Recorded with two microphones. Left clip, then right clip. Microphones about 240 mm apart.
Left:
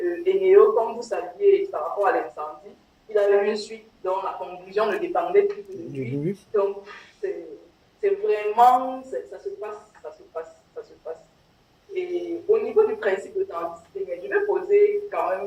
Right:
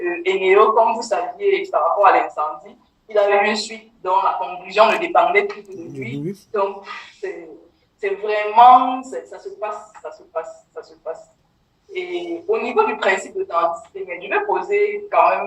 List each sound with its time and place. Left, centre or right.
0.0 s speech: right